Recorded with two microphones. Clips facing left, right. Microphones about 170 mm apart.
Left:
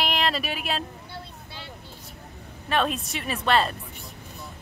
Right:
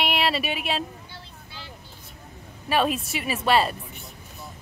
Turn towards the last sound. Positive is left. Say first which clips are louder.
# right 1 dB
turn(degrees=-5)  # may be behind; listen again after turning